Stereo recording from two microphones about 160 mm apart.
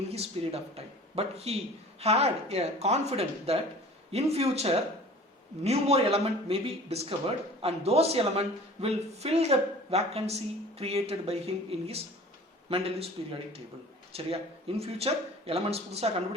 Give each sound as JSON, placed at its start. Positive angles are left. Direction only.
{"t": 0.1, "sound": "a man's voice", "side_deg": -40}
{"t": 14.1, "sound": "speech", "side_deg": -35}